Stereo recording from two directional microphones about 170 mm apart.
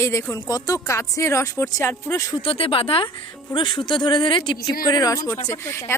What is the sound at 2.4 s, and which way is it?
A woman's voice, 35° left (ahead or behind).